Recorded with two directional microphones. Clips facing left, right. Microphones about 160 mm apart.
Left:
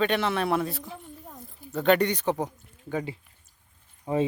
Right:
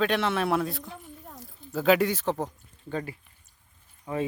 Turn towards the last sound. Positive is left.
turn(degrees=25)  # may be behind; listen again after turning